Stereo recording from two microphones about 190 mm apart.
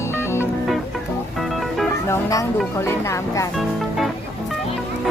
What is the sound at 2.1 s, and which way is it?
Music, 15° left (ahead or behind).